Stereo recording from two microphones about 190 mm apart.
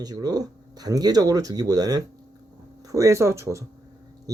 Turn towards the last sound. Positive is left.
turn(degrees=-15)  # may be behind; listen again after turning